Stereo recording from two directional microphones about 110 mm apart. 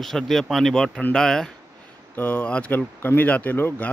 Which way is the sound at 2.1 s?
15° left (ahead or behind).